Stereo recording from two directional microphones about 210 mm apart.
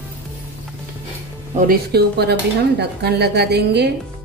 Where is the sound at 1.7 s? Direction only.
50° right (ahead or behind).